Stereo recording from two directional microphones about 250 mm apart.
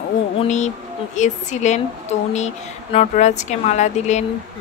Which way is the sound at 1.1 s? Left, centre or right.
Left.